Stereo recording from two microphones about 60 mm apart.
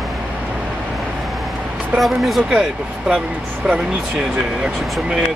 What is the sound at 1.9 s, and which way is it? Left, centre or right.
Speech, centre.